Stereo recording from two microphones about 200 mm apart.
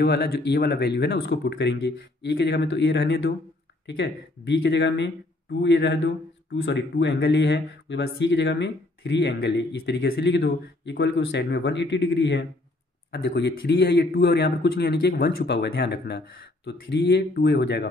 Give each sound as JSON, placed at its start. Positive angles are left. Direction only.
{"t": 0.0, "sound": "speech", "side_deg": 50}